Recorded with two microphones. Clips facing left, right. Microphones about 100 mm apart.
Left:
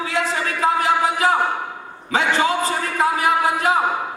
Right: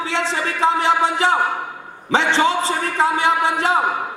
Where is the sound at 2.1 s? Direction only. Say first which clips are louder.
Right 2 dB; 30° right (ahead or behind).